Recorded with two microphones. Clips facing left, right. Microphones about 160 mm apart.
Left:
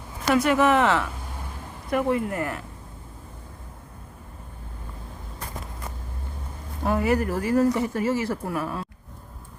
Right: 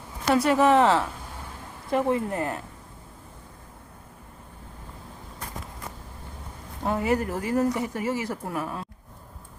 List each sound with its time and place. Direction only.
0.3 s speech: 30° right (ahead or behind)
6.8 s speech: 25° right (ahead or behind)